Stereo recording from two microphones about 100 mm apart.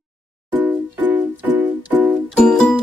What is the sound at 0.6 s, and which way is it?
Music, 15° right (ahead or behind).